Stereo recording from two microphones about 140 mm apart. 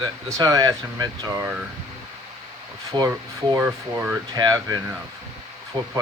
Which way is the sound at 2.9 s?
25° right (ahead or behind).